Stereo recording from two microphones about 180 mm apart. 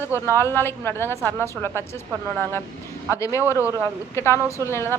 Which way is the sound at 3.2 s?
15° left (ahead or behind).